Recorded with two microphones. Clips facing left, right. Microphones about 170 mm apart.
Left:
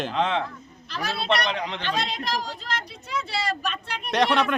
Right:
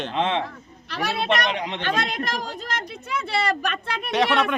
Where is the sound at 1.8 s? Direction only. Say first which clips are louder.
Right 3 dB; 50° right (ahead or behind).